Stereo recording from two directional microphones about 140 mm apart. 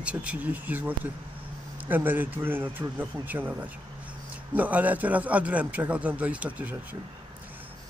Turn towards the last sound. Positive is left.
turn(degrees=-10)  # may be behind; listen again after turning